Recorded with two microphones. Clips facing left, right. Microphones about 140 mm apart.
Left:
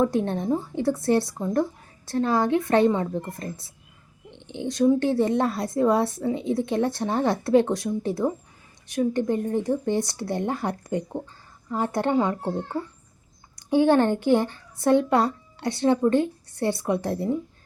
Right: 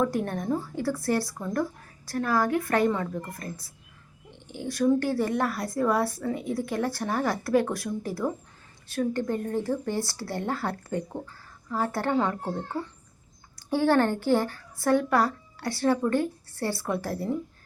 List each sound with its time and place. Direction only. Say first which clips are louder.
0.0 s speech: left 4 dB; 25° left (ahead or behind)